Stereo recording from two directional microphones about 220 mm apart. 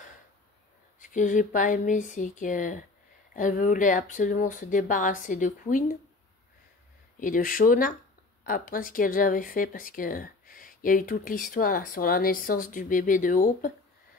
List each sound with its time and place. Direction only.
0.9 s speech: 35° left (ahead or behind)
7.2 s speech: 40° left (ahead or behind)